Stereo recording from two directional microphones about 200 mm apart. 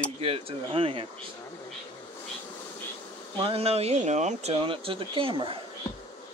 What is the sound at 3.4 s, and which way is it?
Speech, 30° right (ahead or behind).